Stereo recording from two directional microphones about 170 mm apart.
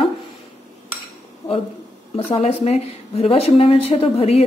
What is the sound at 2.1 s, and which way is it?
A woman's voice, 35° left (ahead or behind).